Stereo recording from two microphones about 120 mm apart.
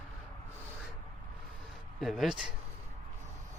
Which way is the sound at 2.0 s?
Centre (ahead or behind).